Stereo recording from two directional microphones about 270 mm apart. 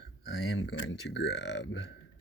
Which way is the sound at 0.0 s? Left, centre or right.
Left.